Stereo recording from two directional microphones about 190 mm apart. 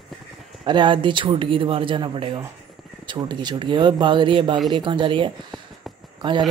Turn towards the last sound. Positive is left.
turn(degrees=-25)  # may be behind; listen again after turning